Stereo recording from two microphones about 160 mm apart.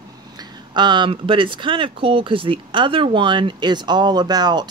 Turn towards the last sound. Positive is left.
turn(degrees=-25)  # may be behind; listen again after turning